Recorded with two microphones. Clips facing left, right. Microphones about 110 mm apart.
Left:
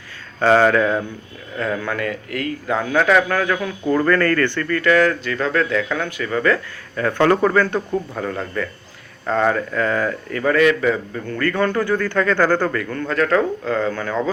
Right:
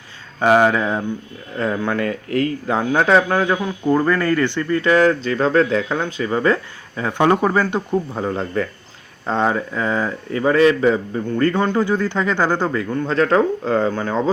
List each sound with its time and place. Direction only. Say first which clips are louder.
0.3 s speech: even; 15° right (ahead or behind)
8.1 s speech: right 3 dB; 25° right (ahead or behind)